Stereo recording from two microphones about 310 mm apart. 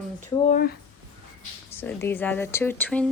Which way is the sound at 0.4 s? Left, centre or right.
Left.